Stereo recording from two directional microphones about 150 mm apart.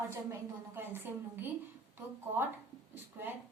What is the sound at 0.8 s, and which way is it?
Speech, 15° right (ahead or behind).